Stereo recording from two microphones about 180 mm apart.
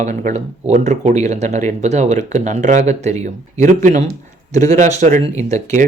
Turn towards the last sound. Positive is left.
turn(degrees=-40)  # may be behind; listen again after turning